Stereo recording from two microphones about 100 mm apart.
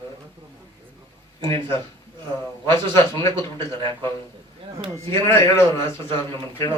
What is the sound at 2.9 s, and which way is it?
Speech, 25° left (ahead or behind).